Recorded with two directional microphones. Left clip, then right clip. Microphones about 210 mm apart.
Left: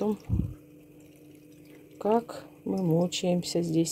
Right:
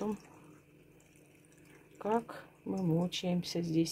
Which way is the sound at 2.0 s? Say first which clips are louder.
Left 7 dB; 20° left (ahead or behind).